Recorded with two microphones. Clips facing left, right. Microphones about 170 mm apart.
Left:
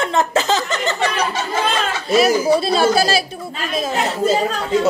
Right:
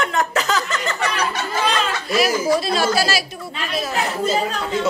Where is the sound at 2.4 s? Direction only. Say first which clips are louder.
Left 4 dB; 30° left (ahead or behind).